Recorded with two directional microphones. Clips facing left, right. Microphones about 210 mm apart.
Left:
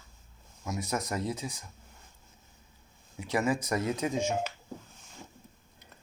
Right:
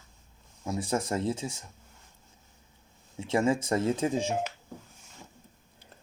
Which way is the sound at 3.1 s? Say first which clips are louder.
Right 3 dB; 25° right (ahead or behind).